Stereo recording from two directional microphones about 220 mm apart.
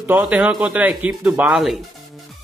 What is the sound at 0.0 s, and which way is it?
A man's voice, 5° right (ahead or behind).